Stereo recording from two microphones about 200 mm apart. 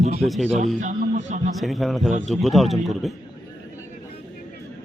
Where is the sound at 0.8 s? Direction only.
40° right (ahead or behind).